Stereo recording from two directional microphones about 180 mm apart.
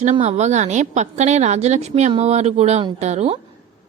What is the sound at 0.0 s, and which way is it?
A woman's voice, 35° right (ahead or behind).